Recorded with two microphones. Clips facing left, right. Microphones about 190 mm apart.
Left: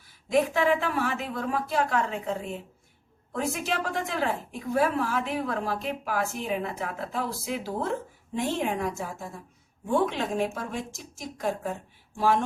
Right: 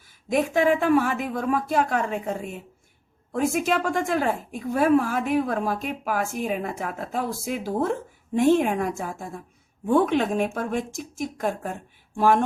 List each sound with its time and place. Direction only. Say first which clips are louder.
0.3 s speech: right 2 dB; 45° right (ahead or behind)
3.5 s speech: right 6 dB; 50° right (ahead or behind)